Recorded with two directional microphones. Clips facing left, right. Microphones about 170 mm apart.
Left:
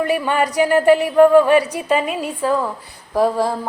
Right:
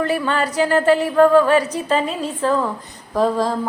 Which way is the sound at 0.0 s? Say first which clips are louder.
Left 2 dB; 15° left (ahead or behind).